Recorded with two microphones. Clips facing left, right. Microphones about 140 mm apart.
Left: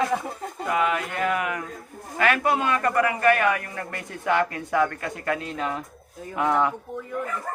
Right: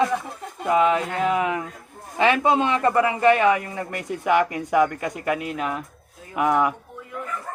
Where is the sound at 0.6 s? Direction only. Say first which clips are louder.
Right 5 dB; 25° right (ahead or behind).